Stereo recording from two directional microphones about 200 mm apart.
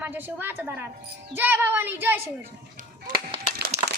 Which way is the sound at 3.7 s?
35° right (ahead or behind).